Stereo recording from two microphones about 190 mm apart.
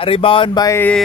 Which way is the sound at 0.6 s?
10° left (ahead or behind).